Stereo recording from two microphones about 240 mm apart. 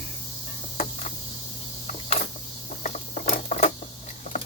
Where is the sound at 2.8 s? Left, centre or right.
Left.